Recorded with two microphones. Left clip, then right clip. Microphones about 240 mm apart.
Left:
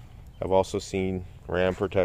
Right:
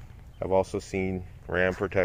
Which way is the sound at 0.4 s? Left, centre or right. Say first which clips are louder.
Left 2 dB; centre.